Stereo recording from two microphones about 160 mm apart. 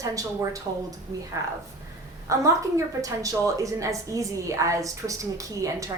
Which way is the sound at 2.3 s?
20° right (ahead or behind).